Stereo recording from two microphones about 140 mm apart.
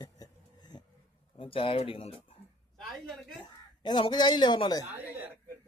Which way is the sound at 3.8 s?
30° left (ahead or behind).